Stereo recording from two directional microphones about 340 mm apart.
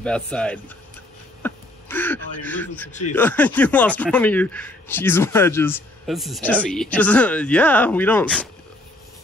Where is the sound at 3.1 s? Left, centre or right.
Centre.